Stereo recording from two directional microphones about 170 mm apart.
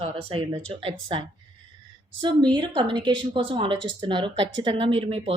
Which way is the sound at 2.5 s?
30° right (ahead or behind).